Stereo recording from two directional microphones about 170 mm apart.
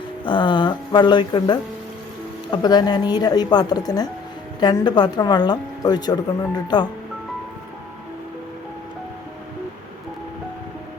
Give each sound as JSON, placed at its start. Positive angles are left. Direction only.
{"t": 0.3, "sound": "speech", "side_deg": 25}